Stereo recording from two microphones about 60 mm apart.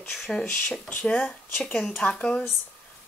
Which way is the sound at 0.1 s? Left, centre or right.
Centre.